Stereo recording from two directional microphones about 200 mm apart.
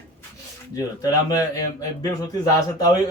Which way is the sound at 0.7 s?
15° left (ahead or behind).